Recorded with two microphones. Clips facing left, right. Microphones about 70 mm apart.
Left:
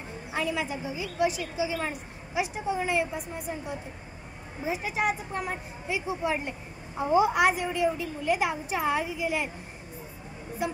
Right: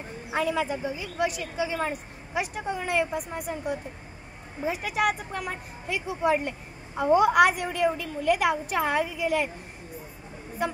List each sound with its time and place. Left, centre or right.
0.3 s a woman's voice: right
5.3 s a woman's voice: left
5.9 s a woman's voice: right